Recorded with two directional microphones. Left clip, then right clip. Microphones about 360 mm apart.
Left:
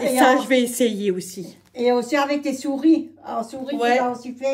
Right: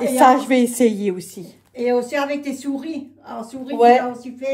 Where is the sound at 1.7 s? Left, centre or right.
Centre.